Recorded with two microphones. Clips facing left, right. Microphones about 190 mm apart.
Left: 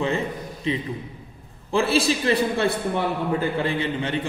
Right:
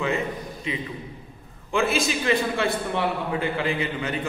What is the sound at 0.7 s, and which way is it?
A man's voice, 30° left (ahead or behind).